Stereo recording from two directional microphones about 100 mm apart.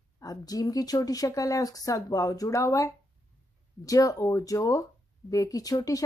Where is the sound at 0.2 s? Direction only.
35° left (ahead or behind).